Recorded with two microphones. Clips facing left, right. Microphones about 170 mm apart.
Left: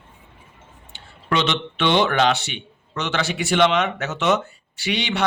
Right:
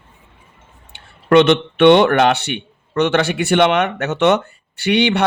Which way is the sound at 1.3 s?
60° right (ahead or behind).